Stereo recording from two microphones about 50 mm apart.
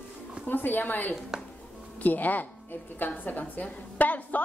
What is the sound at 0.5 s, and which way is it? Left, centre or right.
Speech, left.